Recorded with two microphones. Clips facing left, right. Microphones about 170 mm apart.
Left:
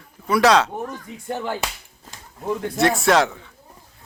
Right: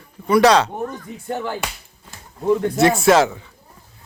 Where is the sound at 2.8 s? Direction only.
Centre (ahead or behind).